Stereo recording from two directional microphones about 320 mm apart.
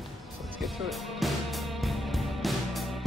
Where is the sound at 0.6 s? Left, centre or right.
Centre.